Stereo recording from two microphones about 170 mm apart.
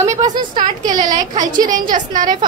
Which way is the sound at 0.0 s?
20° right (ahead or behind).